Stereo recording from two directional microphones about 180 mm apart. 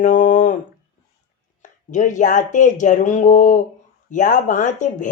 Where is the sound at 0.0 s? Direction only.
45° left (ahead or behind).